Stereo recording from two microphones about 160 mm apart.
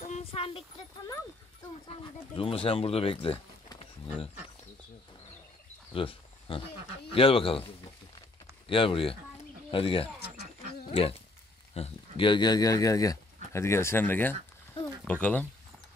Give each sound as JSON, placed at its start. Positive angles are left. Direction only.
{"t": 0.0, "sound": "a sound", "side_deg": 40}
{"t": 1.9, "sound": "speech", "side_deg": 35}
{"t": 5.9, "sound": "speech", "side_deg": 35}
{"t": 8.6, "sound": "speech", "side_deg": 35}
{"t": 10.4, "sound": "a sound", "side_deg": 40}
{"t": 11.7, "sound": "speech", "side_deg": 35}